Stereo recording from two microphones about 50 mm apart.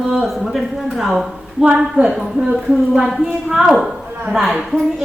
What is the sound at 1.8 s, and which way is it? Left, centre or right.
Speech, centre.